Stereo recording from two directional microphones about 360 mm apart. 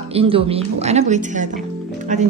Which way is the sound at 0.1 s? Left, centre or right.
Centre.